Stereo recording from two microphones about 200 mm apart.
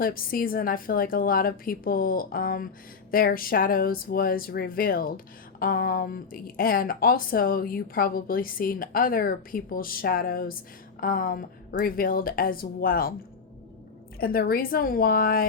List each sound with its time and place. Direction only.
0.0 s speech: 45° left (ahead or behind)
14.2 s speech: 50° left (ahead or behind)